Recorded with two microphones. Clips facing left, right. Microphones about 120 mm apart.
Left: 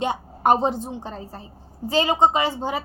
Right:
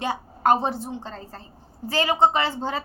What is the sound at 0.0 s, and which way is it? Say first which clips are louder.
A woman's voice: left 2 dB; 20° left (ahead or behind).